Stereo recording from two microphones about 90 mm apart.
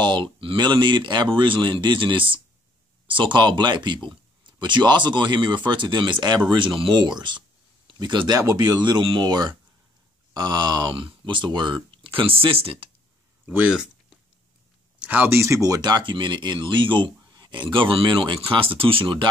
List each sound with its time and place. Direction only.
0.0 s speech: 60° right (ahead or behind)
3.3 s speech: 60° right (ahead or behind); by 12.9 s 85° right
13.5 s speech: 10° right (ahead or behind)
15.0 s speech: 20° right (ahead or behind); by 19.2 s 75° right (ahead or behind)